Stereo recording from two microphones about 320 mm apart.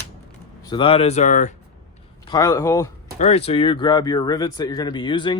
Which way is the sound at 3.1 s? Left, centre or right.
Centre.